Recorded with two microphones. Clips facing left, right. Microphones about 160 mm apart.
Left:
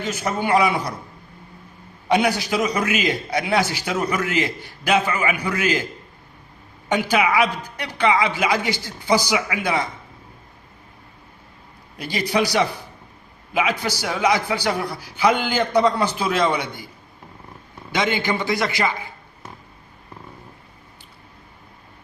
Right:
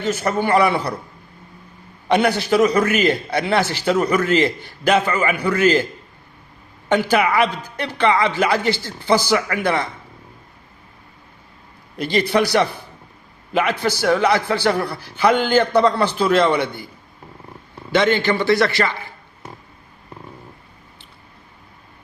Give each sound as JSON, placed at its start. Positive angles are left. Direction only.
{"t": 0.0, "sound": "a man's voice", "side_deg": 10}
{"t": 2.0, "sound": "a man's voice", "side_deg": 5}
{"t": 6.8, "sound": "a man's voice", "side_deg": 10}
{"t": 12.3, "sound": "a man's voice", "side_deg": 10}
{"t": 17.9, "sound": "a man's voice", "side_deg": 10}